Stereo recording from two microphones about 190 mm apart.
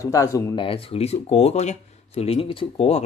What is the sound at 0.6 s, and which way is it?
A man's voice, 30° left (ahead or behind).